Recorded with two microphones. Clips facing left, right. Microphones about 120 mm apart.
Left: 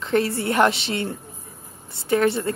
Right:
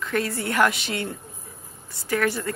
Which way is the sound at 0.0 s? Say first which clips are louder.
Left 5 dB; 25° left (ahead or behind).